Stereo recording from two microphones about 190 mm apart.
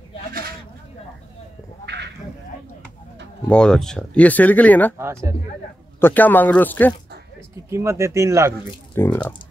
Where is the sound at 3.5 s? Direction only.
5° left (ahead or behind).